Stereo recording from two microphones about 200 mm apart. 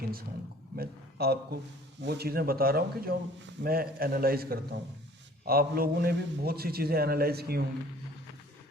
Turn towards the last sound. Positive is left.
turn(degrees=-50)  # may be behind; listen again after turning